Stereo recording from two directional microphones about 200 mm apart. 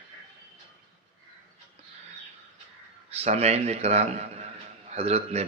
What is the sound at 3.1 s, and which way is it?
Speech, 30° right (ahead or behind).